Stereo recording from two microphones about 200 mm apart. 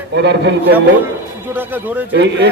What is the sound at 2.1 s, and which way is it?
Speech, 60° right (ahead or behind).